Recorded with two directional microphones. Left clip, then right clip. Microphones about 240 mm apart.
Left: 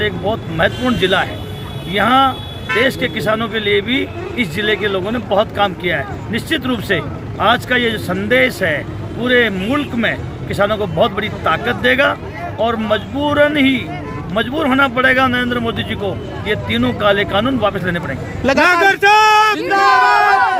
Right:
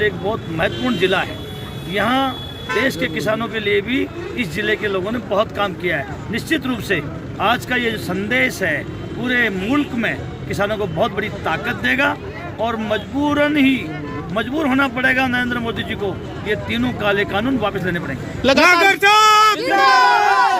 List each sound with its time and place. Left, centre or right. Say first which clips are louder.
0.0 s a man's voice: left 1 dB; centre
18.6 s speech: left 2 dB; right
19.6 s crowd: left 1 dB; right